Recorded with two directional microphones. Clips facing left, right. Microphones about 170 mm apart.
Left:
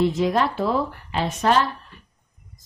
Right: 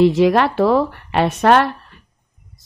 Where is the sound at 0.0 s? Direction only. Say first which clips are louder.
Right 7 dB; 80° right.